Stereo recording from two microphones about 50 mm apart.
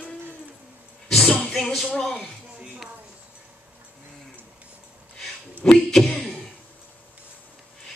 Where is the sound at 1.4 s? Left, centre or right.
Centre.